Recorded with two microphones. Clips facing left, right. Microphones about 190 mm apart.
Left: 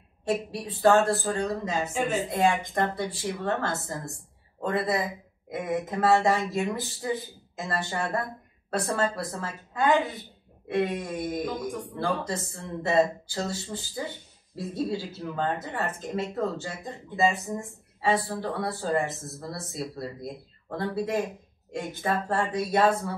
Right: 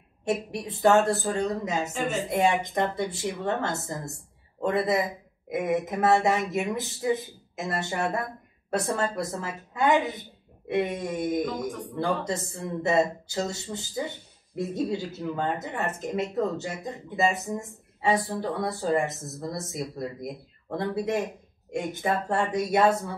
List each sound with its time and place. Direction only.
0.5 s speech: 20° right (ahead or behind)